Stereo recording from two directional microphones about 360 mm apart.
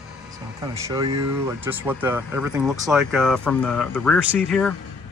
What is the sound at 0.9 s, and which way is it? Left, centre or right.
Speech, centre.